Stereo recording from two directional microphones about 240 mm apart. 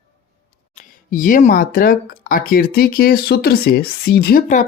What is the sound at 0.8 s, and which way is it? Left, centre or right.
Speech, left.